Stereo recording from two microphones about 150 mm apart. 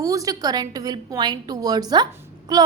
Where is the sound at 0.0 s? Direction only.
20° right (ahead or behind).